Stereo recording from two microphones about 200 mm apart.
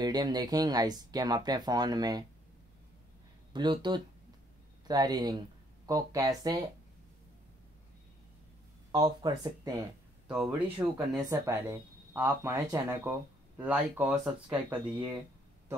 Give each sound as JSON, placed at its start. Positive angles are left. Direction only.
{"t": 0.0, "sound": "speech", "side_deg": -20}
{"t": 3.5, "sound": "speech", "side_deg": -20}
{"t": 8.9, "sound": "speech", "side_deg": -20}
{"t": 10.2, "sound": "a man's voice", "side_deg": 0}